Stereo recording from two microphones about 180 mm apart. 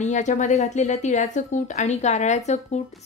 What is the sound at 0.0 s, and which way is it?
A woman's voice, 40° left (ahead or behind).